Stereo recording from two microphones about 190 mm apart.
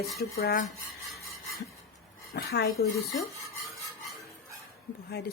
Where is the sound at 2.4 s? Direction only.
60° left (ahead or behind).